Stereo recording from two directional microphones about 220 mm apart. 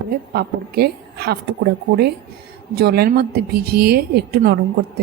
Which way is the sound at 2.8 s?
45° right (ahead or behind).